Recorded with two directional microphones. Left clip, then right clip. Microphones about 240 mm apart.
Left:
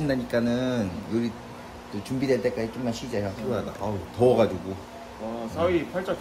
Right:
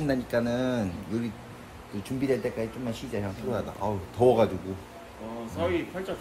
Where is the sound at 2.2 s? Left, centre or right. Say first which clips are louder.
Left 3 dB; centre.